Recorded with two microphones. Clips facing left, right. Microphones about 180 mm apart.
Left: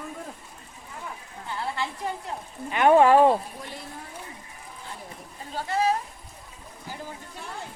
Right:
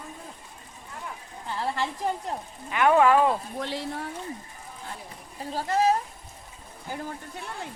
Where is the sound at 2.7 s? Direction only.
30° left (ahead or behind).